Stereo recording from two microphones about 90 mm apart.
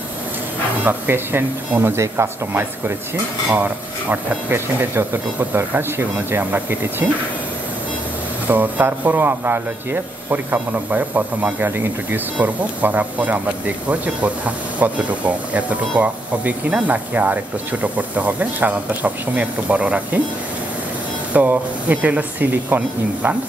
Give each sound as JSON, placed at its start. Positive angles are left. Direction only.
{"t": 0.8, "sound": "speech", "side_deg": -25}
{"t": 8.5, "sound": "speech", "side_deg": -20}
{"t": 21.3, "sound": "speech", "side_deg": -20}